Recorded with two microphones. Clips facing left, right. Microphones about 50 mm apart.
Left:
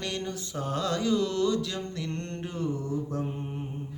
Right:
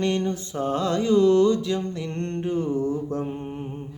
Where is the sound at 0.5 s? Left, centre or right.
Right.